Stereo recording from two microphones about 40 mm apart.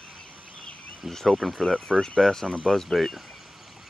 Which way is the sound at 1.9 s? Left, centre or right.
Left.